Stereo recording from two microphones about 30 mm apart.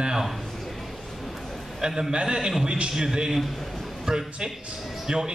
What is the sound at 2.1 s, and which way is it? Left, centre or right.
A man's voice, right.